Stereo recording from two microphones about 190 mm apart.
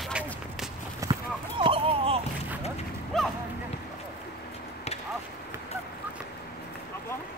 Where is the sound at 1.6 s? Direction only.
30° right (ahead or behind).